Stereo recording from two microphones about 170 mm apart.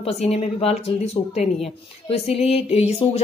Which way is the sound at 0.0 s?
40° left (ahead or behind).